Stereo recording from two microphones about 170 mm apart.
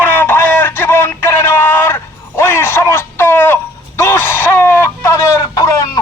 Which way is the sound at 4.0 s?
15° left (ahead or behind).